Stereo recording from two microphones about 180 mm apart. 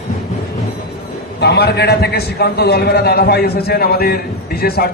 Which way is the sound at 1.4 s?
65° left (ahead or behind).